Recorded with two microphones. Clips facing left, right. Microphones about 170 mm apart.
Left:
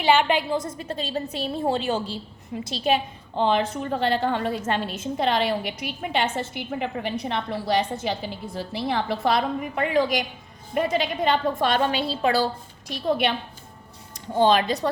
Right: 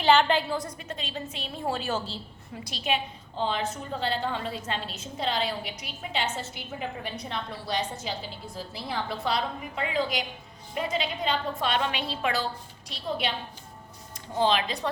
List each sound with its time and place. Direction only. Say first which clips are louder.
0.0 s a woman's voice: left 1 dB; 10° left (ahead or behind)
0.8 s a woman's voice: left 7 dB; 35° left (ahead or behind)
1.6 s a woman's voice: left 4 dB; 25° left (ahead or behind)
2.6 s a woman's voice: left 6 dB; 35° left (ahead or behind)
3.3 s a woman's voice: left 7 dB; 65° left (ahead or behind); by 12.5 s 35° left (ahead or behind)
12.9 s a woman's voice: left 7 dB; 60° left (ahead or behind)
14.3 s a woman's voice: left 6 dB; 45° left (ahead or behind)